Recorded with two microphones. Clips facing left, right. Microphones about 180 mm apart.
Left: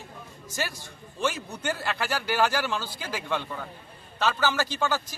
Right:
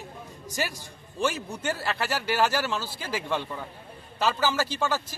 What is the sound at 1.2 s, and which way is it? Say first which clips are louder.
A man's voice: right 1 dB; 5° right (ahead or behind).